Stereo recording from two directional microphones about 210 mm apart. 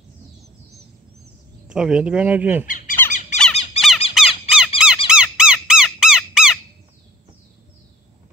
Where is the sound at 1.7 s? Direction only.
5° right (ahead or behind).